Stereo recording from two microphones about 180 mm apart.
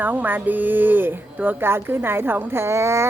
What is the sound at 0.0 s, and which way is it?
Speech, 10° right (ahead or behind).